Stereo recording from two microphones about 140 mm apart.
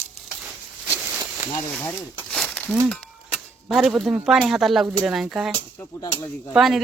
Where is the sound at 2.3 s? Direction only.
5° left (ahead or behind).